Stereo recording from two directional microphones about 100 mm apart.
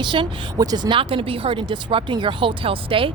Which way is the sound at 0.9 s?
65° right (ahead or behind).